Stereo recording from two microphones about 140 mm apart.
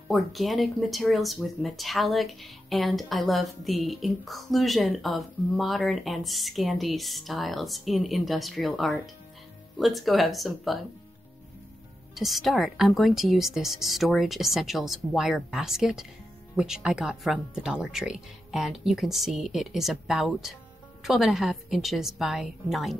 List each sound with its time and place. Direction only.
0.1 s speech: centre (ahead or behind)
12.2 s speech: centre (ahead or behind)